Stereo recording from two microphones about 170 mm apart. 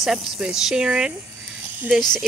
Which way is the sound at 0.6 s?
5° right (ahead or behind).